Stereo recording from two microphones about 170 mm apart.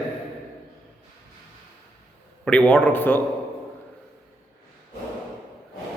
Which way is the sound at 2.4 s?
5° left (ahead or behind).